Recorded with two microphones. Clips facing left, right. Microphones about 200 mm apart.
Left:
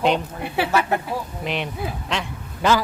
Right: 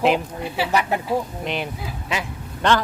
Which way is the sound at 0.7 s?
15° right (ahead or behind).